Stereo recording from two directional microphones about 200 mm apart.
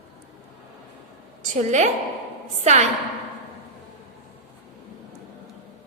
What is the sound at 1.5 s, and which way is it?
A woman's voice, 35° right (ahead or behind).